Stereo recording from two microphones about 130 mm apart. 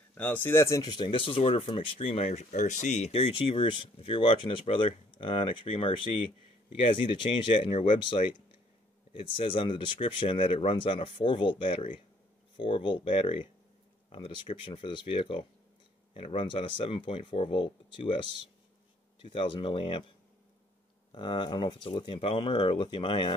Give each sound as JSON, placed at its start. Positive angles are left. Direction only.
{"t": 0.1, "sound": "speech", "side_deg": 15}
{"t": 0.9, "sound": "speech", "side_deg": 40}
{"t": 7.1, "sound": "speech", "side_deg": 40}
{"t": 21.1, "sound": "speech", "side_deg": 35}